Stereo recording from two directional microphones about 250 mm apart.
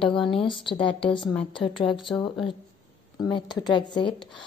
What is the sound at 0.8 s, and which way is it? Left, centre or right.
A woman's voice, left.